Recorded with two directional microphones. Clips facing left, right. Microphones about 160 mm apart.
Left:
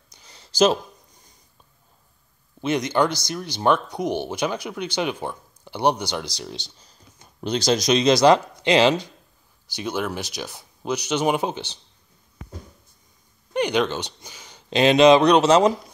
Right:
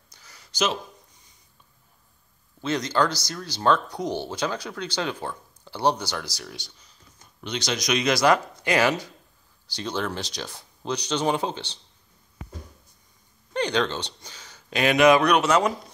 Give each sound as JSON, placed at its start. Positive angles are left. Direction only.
{"t": 0.1, "sound": "a sound", "side_deg": 20}
{"t": 2.6, "sound": "speech", "side_deg": 20}
{"t": 6.9, "sound": "speech", "side_deg": 35}
{"t": 9.8, "sound": "speech", "side_deg": 10}
{"t": 13.5, "sound": "speech", "side_deg": 15}